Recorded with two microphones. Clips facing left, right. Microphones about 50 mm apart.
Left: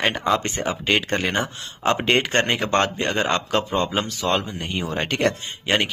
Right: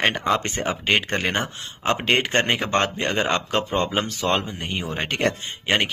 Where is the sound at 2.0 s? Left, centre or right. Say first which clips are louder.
Right 1 dB; centre.